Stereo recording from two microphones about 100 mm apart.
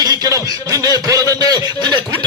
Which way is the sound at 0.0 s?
35° right (ahead or behind).